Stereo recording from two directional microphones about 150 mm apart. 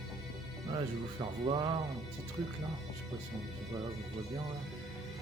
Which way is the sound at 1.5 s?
30° right (ahead or behind).